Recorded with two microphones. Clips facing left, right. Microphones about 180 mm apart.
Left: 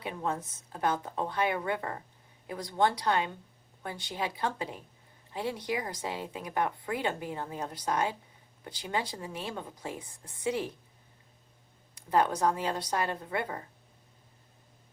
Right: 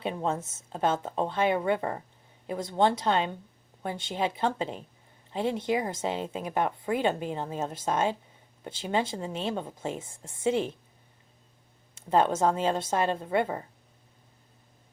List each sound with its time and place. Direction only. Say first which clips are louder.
0.0 s speech: right 4 dB; 25° right (ahead or behind)
11.9 s speech: right 3 dB; 25° right (ahead or behind)